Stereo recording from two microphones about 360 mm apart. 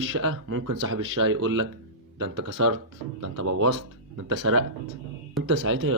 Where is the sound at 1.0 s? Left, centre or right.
Right.